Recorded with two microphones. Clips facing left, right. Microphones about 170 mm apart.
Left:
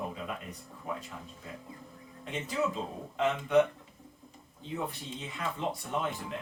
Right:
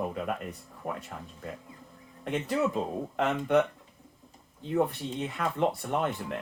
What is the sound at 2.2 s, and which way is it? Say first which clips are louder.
Speech: right 4 dB; 60° right (ahead or behind).